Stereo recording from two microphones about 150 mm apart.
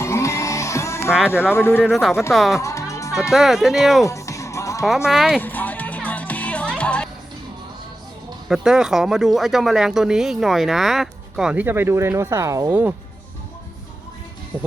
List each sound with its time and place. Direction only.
0.0 s music: 20° left (ahead or behind)
1.3 s speech: 15° left (ahead or behind)
1.8 s speech: centre (ahead or behind)
2.6 s music: 20° left (ahead or behind)
3.3 s speech: centre (ahead or behind)
4.0 s music: 20° left (ahead or behind)
5.0 s speech: 5° right (ahead or behind)
5.4 s music: 10° left (ahead or behind)
8.4 s speech: 5° right (ahead or behind); by 12.7 s 20° right (ahead or behind)
14.5 s music: 15° right (ahead or behind)